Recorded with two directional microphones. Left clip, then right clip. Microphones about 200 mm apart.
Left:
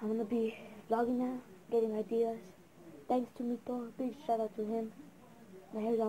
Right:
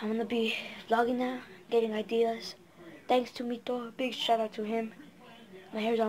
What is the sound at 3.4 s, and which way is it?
Speech, 20° right (ahead or behind).